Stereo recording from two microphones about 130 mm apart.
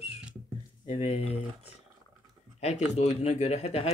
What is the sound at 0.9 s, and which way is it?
Speech, 55° left (ahead or behind).